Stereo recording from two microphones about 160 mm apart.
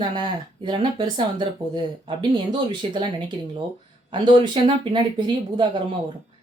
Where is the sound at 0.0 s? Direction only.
30° right (ahead or behind).